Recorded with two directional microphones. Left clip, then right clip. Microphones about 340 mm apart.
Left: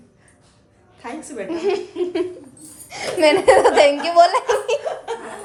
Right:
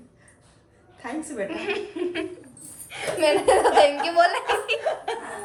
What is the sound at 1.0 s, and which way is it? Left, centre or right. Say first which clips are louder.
A woman's voice: left 1 dB; centre.